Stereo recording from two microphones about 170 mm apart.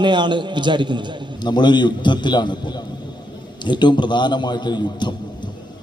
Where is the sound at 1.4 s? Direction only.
25° left (ahead or behind).